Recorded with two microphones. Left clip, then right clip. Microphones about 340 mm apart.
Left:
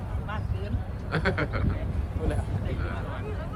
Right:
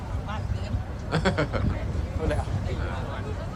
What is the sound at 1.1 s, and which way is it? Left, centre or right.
Speech, centre.